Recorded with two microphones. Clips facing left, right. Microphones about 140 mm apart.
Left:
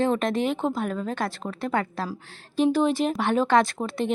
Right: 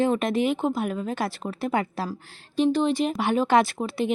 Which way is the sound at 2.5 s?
5° left (ahead or behind).